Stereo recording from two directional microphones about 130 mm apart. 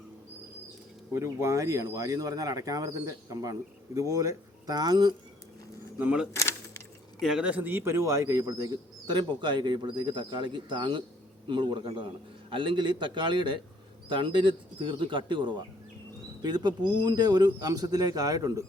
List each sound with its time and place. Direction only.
1.1 s speech: 20° right (ahead or behind)
6.0 s speech: 10° right (ahead or behind)
6.3 s a sound: 20° left (ahead or behind)
7.2 s speech: 5° right (ahead or behind); by 18.6 s 30° right (ahead or behind)